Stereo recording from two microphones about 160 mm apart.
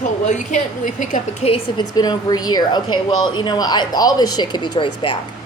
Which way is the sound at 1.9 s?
25° left (ahead or behind).